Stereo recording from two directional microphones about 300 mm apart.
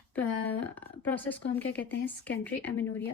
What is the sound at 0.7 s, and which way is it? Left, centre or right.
Speech, centre.